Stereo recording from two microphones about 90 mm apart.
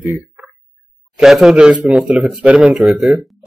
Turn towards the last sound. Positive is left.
turn(degrees=0)  # may be behind; listen again after turning